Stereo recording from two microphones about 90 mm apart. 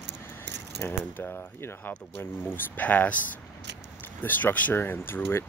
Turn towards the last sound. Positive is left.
turn(degrees=25)  # may be behind; listen again after turning